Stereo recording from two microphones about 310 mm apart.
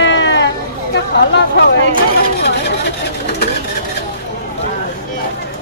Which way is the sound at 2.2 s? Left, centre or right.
Left.